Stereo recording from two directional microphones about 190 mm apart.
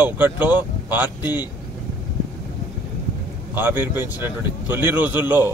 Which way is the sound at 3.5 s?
10° right (ahead or behind).